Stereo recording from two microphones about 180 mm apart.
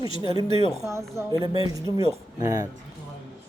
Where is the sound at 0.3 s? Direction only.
30° left (ahead or behind).